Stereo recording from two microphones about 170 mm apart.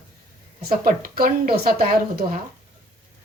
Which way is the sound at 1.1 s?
60° right (ahead or behind).